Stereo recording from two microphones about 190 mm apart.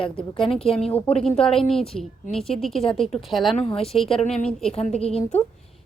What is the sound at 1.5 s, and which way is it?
Speech, 30° left (ahead or behind).